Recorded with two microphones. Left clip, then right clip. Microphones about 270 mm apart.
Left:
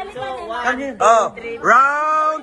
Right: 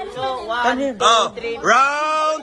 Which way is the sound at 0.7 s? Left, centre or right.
Right.